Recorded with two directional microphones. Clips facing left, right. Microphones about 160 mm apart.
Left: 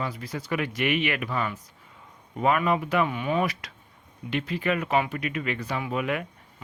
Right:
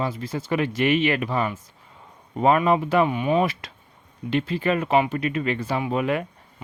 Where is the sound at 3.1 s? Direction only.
20° right (ahead or behind).